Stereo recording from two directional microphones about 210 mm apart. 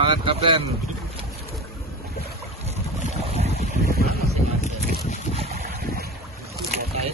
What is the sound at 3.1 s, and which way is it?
Boat, 30° right (ahead or behind).